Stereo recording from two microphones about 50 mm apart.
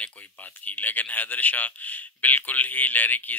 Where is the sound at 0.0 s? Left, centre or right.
Left.